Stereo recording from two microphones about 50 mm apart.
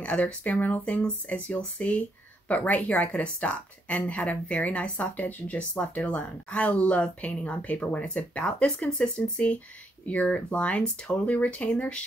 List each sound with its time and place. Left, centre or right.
0.0 s speech: left